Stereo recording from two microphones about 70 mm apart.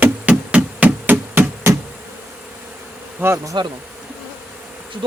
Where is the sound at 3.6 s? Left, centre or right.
Right.